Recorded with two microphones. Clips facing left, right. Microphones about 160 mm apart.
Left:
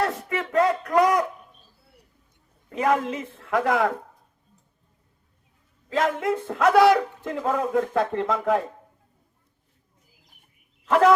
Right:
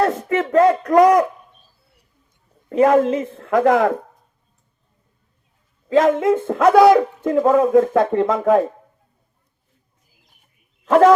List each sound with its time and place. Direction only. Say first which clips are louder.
0.0 s a sound: right 7 dB; 40° right (ahead or behind)
2.6 s a man's voice: right 9 dB; 40° right (ahead or behind)
6.0 s a man's voice: right 8 dB; 40° right (ahead or behind)
10.8 s speech: right 6 dB; 45° right (ahead or behind)